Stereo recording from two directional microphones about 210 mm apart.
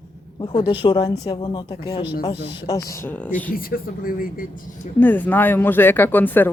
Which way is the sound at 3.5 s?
45° left (ahead or behind).